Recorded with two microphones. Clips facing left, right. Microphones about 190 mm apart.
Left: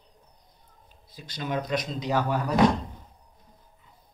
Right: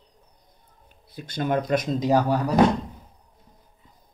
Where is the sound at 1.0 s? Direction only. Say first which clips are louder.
Right 7 dB; 55° right (ahead or behind); by 2.5 s 35° right (ahead or behind).